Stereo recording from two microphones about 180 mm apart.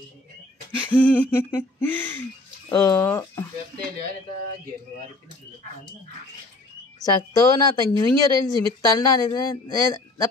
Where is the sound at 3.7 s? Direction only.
55° right (ahead or behind).